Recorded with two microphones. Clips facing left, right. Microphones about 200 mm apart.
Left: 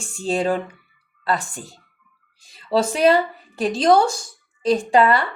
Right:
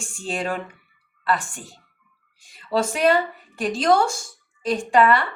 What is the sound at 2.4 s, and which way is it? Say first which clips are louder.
Speech: left 3 dB; 35° left (ahead or behind).